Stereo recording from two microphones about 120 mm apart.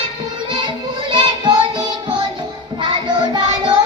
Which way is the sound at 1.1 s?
40° right (ahead or behind).